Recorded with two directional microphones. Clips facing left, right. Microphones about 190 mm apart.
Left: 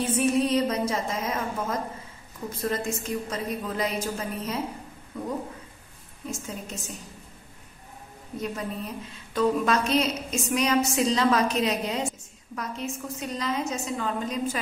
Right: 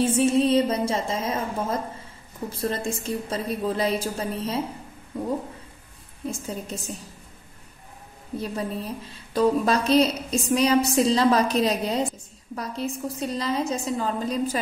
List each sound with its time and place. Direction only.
0.0 s a woman's voice: 25° right (ahead or behind)
6.3 s a woman's voice: 35° right (ahead or behind)
8.4 s a woman's voice: 30° right (ahead or behind)